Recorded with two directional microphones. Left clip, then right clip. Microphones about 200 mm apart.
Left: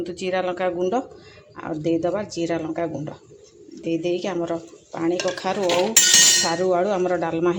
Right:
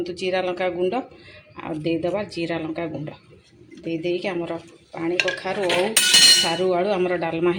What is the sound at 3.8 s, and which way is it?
Speech, 15° left (ahead or behind).